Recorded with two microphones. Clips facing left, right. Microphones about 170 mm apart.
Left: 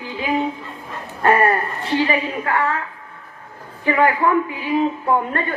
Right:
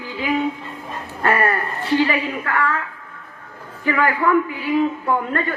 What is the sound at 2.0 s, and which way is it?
Speech, 25° left (ahead or behind).